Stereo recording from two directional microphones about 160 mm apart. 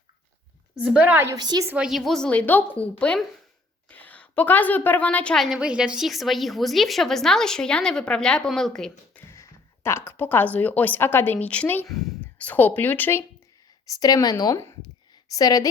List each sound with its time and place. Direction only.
0.9 s a woman's voice: 10° right (ahead or behind)
1.4 s a woman's voice: 25° right (ahead or behind)
1.7 s a woman's voice: 5° right (ahead or behind)
9.3 s speech: 15° left (ahead or behind)
14.0 s speech: 25° left (ahead or behind)